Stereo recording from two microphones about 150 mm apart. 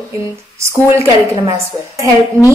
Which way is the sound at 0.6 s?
20° right (ahead or behind).